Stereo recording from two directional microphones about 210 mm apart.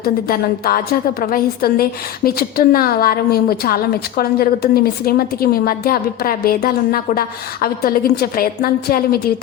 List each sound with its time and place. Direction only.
0.0 s a woman's voice: 45° left (ahead or behind)